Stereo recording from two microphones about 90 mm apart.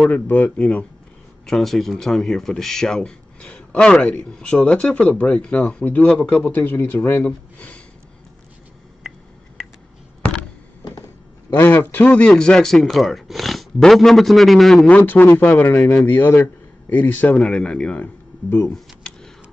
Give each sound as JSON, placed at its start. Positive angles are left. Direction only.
{"t": 0.1, "sound": "speech", "side_deg": 20}
{"t": 1.4, "sound": "speech", "side_deg": 5}
{"t": 7.2, "sound": "speech", "side_deg": 15}
{"t": 11.5, "sound": "speech", "side_deg": 25}
{"t": 12.0, "sound": "speech", "side_deg": 10}
{"t": 14.9, "sound": "speech", "side_deg": 20}